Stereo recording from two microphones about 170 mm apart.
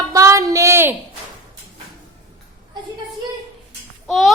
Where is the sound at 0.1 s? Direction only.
20° right (ahead or behind).